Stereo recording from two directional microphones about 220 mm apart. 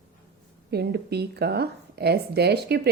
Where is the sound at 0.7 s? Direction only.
45° right (ahead or behind).